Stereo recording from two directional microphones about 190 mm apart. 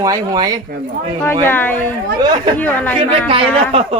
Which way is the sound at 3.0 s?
30° right (ahead or behind).